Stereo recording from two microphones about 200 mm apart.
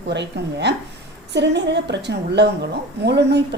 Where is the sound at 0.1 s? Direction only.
60° right (ahead or behind).